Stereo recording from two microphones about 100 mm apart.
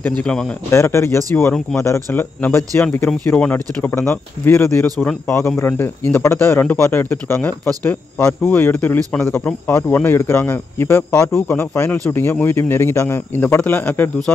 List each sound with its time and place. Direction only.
0.0 s speech: 15° left (ahead or behind)
0.7 s a man's voice: 30° left (ahead or behind)
2.4 s a man's voice: 20° left (ahead or behind)